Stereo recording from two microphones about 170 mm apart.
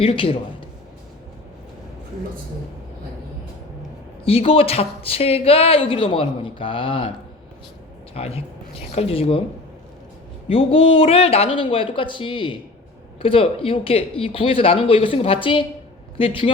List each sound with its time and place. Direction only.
0.0 s speech: 35° left (ahead or behind)
4.3 s speech: 35° left (ahead or behind)
8.1 s speech: 35° left (ahead or behind)
10.5 s speech: 35° left (ahead or behind)